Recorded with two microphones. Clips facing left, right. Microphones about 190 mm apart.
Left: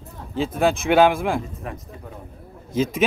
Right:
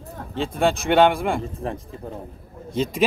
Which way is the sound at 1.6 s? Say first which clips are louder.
Right 5 dB; 30° right (ahead or behind).